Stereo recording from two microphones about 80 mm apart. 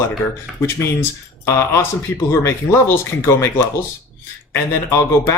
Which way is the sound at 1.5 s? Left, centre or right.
Left.